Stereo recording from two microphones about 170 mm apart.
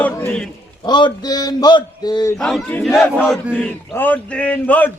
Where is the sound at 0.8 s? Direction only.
25° left (ahead or behind).